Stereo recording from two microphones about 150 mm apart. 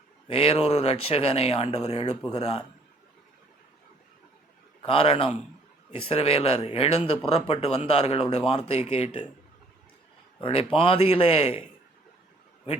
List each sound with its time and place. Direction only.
0.3 s speech: 40° left (ahead or behind)
4.8 s speech: 40° left (ahead or behind)
10.4 s speech: 35° left (ahead or behind)